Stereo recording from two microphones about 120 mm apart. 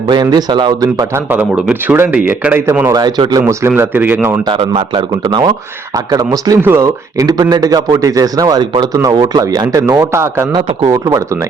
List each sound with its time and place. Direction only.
0.1 s a man's voice: 35° right (ahead or behind)
1.3 s a man's voice: 10° right (ahead or behind)
2.9 s a man's voice: 35° right (ahead or behind)
3.8 s a man's voice: 15° right (ahead or behind)
4.4 s a man's voice: 40° right (ahead or behind); by 7.3 s 25° right (ahead or behind)
7.3 s a man's voice: 35° right (ahead or behind)